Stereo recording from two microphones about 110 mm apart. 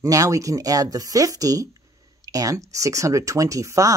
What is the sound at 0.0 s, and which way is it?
Speech, 30° right (ahead or behind).